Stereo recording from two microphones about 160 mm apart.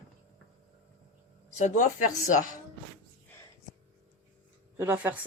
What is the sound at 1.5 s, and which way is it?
Speech, 50° left (ahead or behind).